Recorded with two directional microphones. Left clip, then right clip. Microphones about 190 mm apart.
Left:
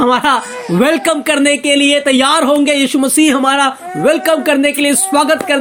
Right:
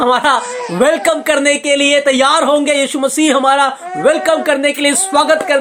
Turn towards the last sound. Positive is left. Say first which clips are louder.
# right 1 dB
turn(degrees=35)  # may be behind; listen again after turning